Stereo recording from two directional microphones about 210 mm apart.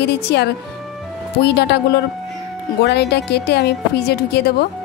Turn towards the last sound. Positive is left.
turn(degrees=50)  # may be behind; listen again after turning